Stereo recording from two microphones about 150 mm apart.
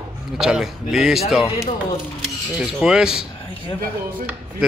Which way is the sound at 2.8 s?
5° right (ahead or behind).